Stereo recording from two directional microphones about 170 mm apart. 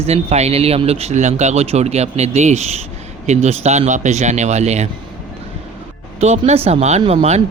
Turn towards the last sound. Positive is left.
turn(degrees=-40)  # may be behind; listen again after turning